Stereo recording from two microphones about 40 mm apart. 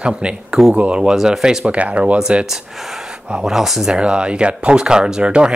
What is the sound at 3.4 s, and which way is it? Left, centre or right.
Speech, centre.